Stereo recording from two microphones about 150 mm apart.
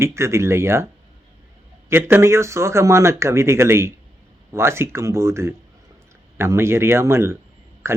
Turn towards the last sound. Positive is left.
turn(degrees=-15)  # may be behind; listen again after turning